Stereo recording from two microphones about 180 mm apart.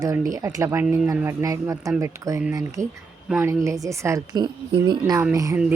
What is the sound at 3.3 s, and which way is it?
Speech, 15° right (ahead or behind).